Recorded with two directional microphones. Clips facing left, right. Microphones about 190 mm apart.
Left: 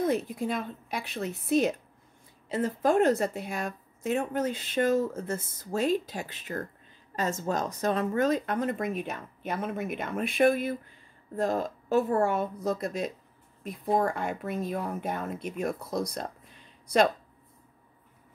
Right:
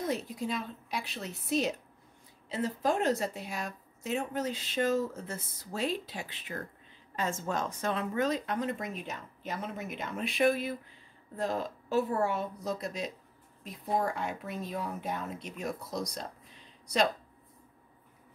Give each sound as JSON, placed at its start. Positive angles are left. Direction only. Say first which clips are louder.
{"t": 0.0, "sound": "speech", "louder": "left 6 dB", "side_deg": 55}